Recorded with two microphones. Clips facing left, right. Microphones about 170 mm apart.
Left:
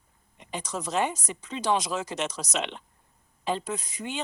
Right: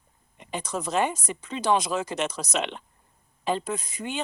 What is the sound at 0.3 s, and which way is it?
Speech, 55° right (ahead or behind).